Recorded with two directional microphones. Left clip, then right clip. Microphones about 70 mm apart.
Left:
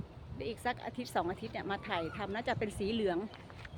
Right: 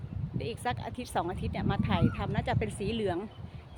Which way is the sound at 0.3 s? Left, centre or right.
Right.